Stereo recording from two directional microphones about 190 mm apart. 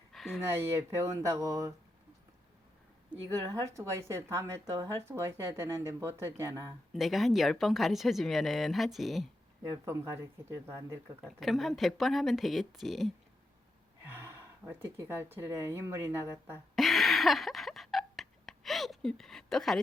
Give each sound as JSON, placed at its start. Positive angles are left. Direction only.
{"t": 0.1, "sound": "a sound", "side_deg": 0}
{"t": 0.4, "sound": "speech", "side_deg": -15}
{"t": 3.1, "sound": "speech", "side_deg": -15}
{"t": 6.9, "sound": "speech", "side_deg": 0}
{"t": 9.8, "sound": "speech", "side_deg": -15}
{"t": 11.3, "sound": "speech", "side_deg": 0}
{"t": 14.0, "sound": "speech", "side_deg": -10}
{"t": 16.7, "sound": "a sound", "side_deg": 0}